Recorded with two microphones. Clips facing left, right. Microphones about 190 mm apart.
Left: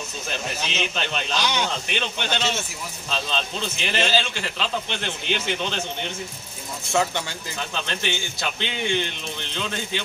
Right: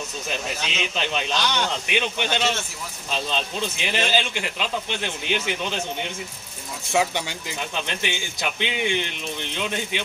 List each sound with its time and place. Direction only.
0.7 s a man's voice: 10° right (ahead or behind)
1.4 s speech: 10° left (ahead or behind)
1.9 s a man's voice: 10° right (ahead or behind)